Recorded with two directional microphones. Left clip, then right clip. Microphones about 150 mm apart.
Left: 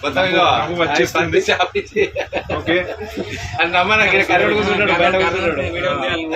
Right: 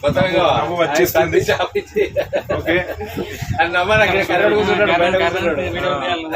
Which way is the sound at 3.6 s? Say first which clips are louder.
Even; 45° left (ahead or behind).